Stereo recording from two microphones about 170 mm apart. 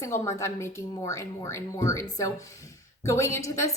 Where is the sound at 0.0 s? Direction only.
15° left (ahead or behind).